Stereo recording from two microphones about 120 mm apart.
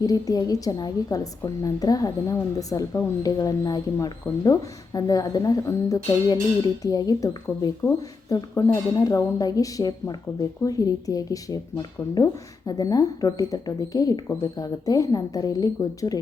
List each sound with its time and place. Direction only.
0.0 s speech: 30° left (ahead or behind)